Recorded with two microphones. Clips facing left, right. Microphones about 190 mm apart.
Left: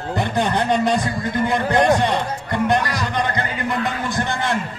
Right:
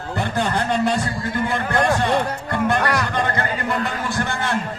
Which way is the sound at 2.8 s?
60° right (ahead or behind).